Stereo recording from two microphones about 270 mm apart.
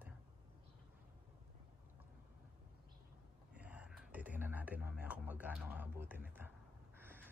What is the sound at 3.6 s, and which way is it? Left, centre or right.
Speech, centre.